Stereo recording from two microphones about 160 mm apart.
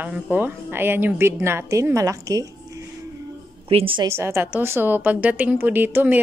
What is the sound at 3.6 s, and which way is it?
Speech, 35° right (ahead or behind).